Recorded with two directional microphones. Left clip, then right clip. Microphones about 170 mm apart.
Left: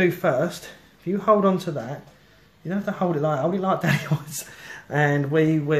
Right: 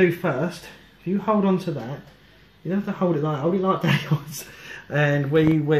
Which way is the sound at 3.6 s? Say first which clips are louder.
Right 1 dB; 40° left (ahead or behind).